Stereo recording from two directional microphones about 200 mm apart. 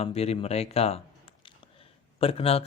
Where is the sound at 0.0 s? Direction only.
30° left (ahead or behind).